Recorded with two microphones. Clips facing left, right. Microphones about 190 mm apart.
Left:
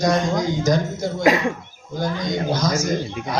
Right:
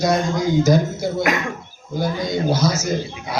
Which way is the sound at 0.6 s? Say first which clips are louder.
Right 3 dB; 10° right (ahead or behind).